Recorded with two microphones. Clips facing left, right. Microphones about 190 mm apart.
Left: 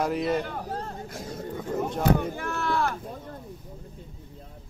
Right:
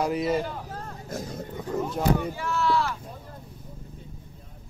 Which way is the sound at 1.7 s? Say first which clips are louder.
Left 1 dB; 55° left (ahead or behind).